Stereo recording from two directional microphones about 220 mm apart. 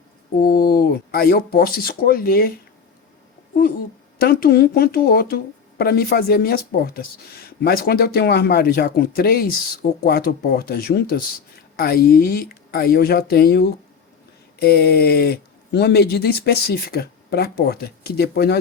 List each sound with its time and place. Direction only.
0.3 s speech: 40° left (ahead or behind)
4.2 s a woman's voice: 45° left (ahead or behind)